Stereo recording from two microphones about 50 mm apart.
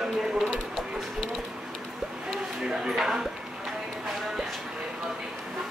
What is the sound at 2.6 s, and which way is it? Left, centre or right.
Speech, centre.